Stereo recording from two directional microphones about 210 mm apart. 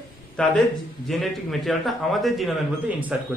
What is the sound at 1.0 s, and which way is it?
A man's voice, centre (ahead or behind).